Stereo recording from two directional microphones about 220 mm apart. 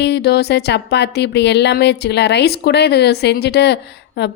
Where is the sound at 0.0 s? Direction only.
50° left (ahead or behind).